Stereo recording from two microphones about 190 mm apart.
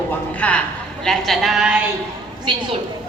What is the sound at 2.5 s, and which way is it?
Speech, 25° right (ahead or behind).